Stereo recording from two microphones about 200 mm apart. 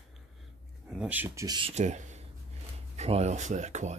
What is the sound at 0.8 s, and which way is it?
Speech, 5° right (ahead or behind).